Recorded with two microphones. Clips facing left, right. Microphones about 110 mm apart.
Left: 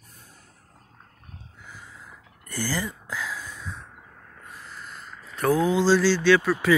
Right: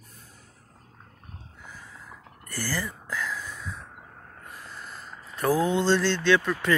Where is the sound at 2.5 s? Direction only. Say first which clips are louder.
Left 3 dB; 15° left (ahead or behind).